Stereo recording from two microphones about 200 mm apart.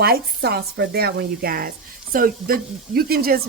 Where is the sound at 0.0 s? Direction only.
50° right (ahead or behind).